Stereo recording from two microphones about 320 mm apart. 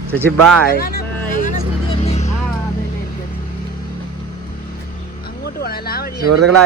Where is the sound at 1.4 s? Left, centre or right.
Left.